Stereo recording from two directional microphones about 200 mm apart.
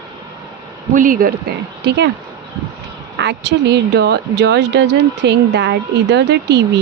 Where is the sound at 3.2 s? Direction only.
60° right (ahead or behind).